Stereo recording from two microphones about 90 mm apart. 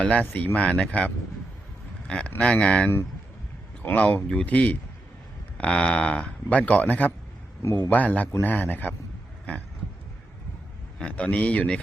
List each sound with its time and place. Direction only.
0.0 s a man's voice: 15° left (ahead or behind)
7.6 s a man's voice: 30° left (ahead or behind)
7.9 s a man's voice: 15° left (ahead or behind)
11.0 s a man's voice: 15° left (ahead or behind)